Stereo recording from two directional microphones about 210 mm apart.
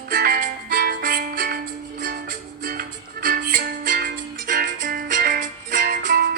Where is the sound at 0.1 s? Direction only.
40° right (ahead or behind).